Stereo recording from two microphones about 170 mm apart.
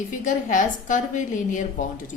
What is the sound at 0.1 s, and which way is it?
A woman's voice, 50° left (ahead or behind).